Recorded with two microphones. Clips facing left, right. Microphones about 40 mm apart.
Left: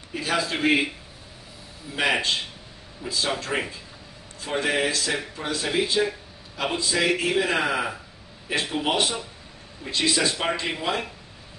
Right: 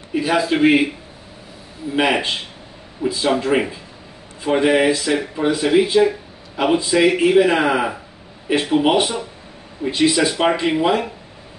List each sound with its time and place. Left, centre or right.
0.1 s a man's voice: centre
3.0 s speech: right